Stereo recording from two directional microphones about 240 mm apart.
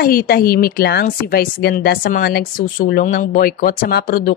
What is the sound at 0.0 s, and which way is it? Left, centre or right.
A woman's voice, left.